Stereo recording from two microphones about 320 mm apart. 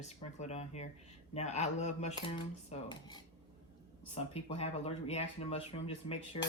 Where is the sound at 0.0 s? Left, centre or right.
Left.